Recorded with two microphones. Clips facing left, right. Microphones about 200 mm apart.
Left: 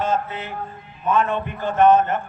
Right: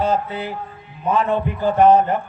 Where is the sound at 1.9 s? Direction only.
15° right (ahead or behind).